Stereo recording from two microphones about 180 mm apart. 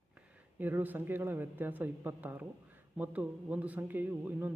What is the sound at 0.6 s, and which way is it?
Speech, 10° right (ahead or behind).